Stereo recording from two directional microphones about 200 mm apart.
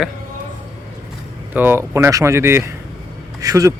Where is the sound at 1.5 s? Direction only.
10° right (ahead or behind).